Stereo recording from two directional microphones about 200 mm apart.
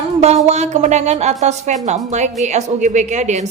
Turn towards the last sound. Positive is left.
turn(degrees=-35)  # may be behind; listen again after turning